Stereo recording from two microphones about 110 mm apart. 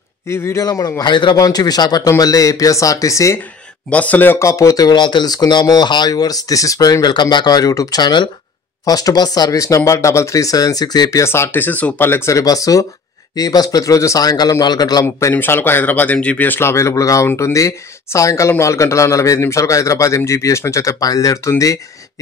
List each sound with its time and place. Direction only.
0.3 s speech: 25° left (ahead or behind)
3.9 s speech: 15° left (ahead or behind); by 15.0 s 40° left (ahead or behind)
15.1 s speech: 20° left (ahead or behind)